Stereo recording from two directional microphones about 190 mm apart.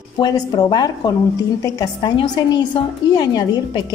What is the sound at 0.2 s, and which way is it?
A woman's voice, 20° left (ahead or behind).